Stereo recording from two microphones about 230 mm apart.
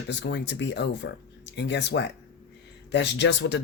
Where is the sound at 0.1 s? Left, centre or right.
Left.